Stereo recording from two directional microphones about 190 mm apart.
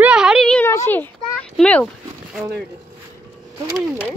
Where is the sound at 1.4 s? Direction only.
5° left (ahead or behind).